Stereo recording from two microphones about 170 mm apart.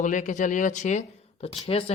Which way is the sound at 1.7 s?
35° left (ahead or behind).